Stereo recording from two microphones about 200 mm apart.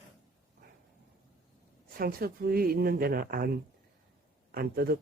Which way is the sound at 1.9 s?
45° right (ahead or behind).